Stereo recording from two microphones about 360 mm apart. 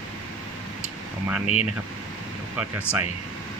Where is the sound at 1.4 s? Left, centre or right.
Centre.